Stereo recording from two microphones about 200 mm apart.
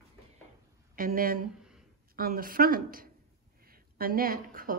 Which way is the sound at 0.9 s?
45° right (ahead or behind).